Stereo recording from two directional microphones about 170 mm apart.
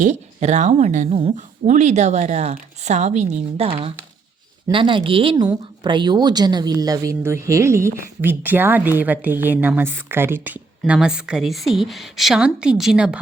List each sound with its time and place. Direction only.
0.0 s a woman's voice: 45° right (ahead or behind); by 13.1 s 5° right (ahead or behind)